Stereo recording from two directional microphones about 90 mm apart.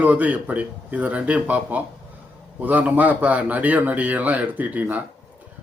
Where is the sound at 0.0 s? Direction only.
15° right (ahead or behind).